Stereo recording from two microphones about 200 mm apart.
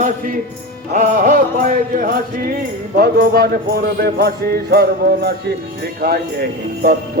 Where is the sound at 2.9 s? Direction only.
50° right (ahead or behind).